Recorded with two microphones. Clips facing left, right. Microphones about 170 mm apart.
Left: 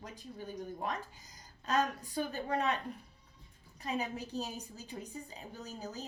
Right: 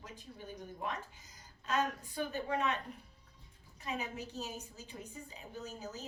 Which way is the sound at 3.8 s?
35° left (ahead or behind).